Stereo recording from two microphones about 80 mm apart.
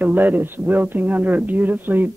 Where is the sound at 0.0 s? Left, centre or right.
Right.